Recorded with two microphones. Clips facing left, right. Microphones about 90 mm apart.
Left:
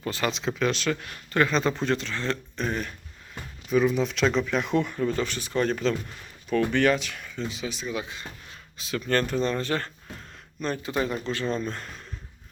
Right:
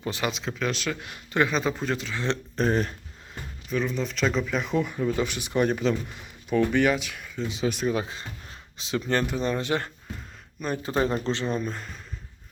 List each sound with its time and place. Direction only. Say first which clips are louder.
0.0 s speech: left 1 dB; 15° right (ahead or behind)
0.3 s speech: left 3 dB; centre (ahead or behind)
1.0 s speech: right 2 dB; 15° right (ahead or behind)
2.6 s speech: right 9 dB; 35° right (ahead or behind)
3.7 s speech: left 5 dB; 5° left (ahead or behind)
7.7 s speech: right 7 dB; 55° right (ahead or behind)
7.9 s speech: right 3 dB; 35° right (ahead or behind); by 9.9 s 15° right (ahead or behind)
10.8 s speech: right 5 dB; 30° right (ahead or behind)
11.5 s speech: even; 5° right (ahead or behind)